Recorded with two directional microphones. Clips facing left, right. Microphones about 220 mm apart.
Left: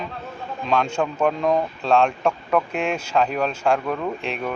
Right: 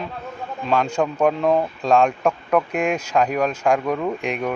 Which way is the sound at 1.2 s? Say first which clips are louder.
Right 2 dB; 5° right (ahead or behind).